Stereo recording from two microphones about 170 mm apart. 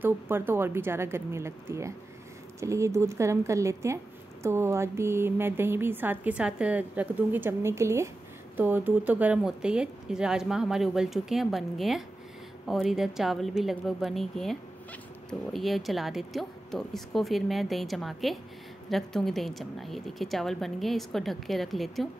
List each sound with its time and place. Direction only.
0.0 s a woman's voice: 15° right (ahead or behind)